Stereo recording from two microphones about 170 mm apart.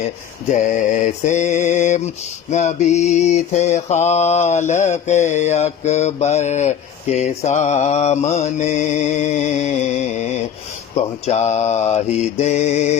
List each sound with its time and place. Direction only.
0.5 s mantra: 45° left (ahead or behind)